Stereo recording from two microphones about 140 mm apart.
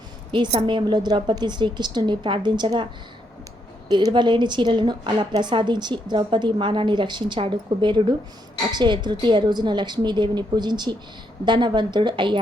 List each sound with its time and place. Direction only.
0.3 s a woman's voice: 35° right (ahead or behind)
3.8 s a woman's voice: 30° right (ahead or behind)